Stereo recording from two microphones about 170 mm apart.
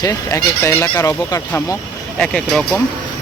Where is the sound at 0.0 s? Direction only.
20° left (ahead or behind).